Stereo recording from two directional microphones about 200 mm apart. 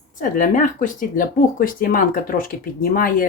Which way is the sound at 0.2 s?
40° left (ahead or behind).